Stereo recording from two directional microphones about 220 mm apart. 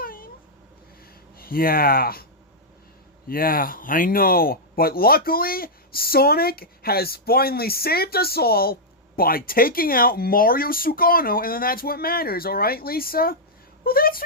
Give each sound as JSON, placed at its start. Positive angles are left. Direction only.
{"t": 0.0, "sound": "cat", "side_deg": 40}
{"t": 1.4, "sound": "speech", "side_deg": 40}
{"t": 3.2, "sound": "speech", "side_deg": 40}